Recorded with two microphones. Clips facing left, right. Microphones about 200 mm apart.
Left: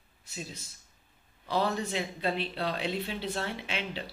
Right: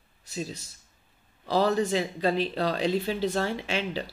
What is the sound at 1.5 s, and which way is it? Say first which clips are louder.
Speech: right 6 dB; 40° right (ahead or behind).